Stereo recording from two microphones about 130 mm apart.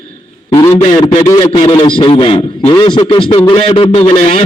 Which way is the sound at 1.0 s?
35° left (ahead or behind).